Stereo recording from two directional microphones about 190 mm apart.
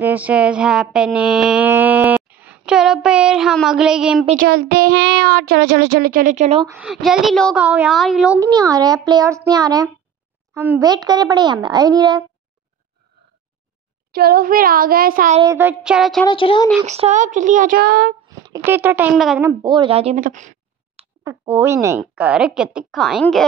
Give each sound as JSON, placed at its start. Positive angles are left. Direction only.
{"t": 0.0, "sound": "mantra", "side_deg": -10}
{"t": 4.4, "sound": "speech", "side_deg": -55}
{"t": 6.7, "sound": "a woman's voice", "side_deg": 0}
{"t": 8.4, "sound": "a child's voice", "side_deg": -20}
{"t": 14.1, "sound": "a woman's voice", "side_deg": -50}
{"t": 15.4, "sound": "a woman's voice", "side_deg": -10}
{"t": 16.3, "sound": "speech", "side_deg": 25}
{"t": 16.8, "sound": "speech", "side_deg": -35}
{"t": 18.5, "sound": "a woman's voice", "side_deg": -10}
{"t": 19.4, "sound": "a child's voice", "side_deg": -25}
{"t": 20.2, "sound": "a sound", "side_deg": -45}
{"t": 21.2, "sound": "a woman's voice", "side_deg": -15}